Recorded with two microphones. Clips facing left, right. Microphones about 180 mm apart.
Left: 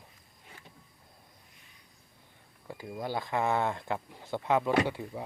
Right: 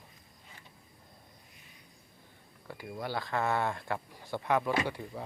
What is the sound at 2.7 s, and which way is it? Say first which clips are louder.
Speech: left 2 dB; 20° left (ahead or behind).